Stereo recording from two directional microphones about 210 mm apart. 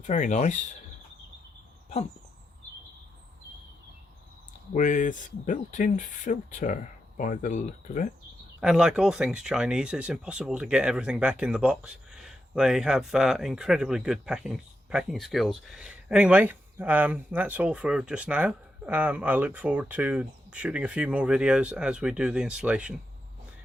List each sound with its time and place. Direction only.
0.1 s speech: 35° left (ahead or behind)
4.7 s speech: 40° left (ahead or behind)
8.6 s speech: 5° right (ahead or behind)